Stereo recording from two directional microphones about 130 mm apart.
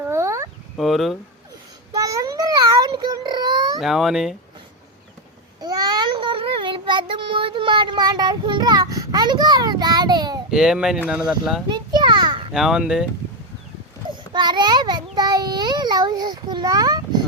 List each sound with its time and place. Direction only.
0.0 s a sound: 20° right (ahead or behind)
0.8 s speech: centre (ahead or behind)
1.9 s a sound: 25° right (ahead or behind)
3.8 s speech: centre (ahead or behind)
5.5 s child singing: 30° right (ahead or behind)
10.5 s speech: 5° right (ahead or behind)
11.7 s a sound: 35° right (ahead or behind)
12.5 s speech: 5° right (ahead or behind)
14.3 s child singing: 35° right (ahead or behind)